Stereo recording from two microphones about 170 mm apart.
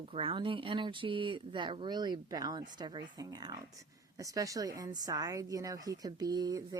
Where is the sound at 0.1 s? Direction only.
30° right (ahead or behind).